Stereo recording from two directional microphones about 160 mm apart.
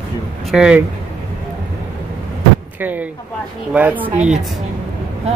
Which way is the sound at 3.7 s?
10° right (ahead or behind).